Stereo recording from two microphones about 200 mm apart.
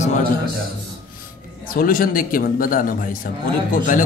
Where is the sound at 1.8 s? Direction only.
45° left (ahead or behind).